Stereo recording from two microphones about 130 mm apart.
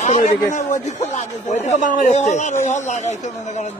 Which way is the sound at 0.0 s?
75° left (ahead or behind).